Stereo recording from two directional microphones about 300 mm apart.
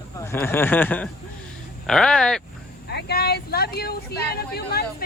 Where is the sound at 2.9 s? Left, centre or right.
Left.